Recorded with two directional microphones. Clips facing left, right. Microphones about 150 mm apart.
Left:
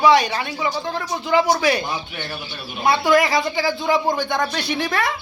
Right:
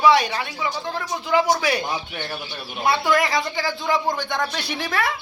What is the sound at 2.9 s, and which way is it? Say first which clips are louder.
Speech: left 4 dB; 5° left (ahead or behind).